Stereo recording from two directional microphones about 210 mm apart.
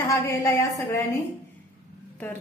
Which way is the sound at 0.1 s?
15° left (ahead or behind).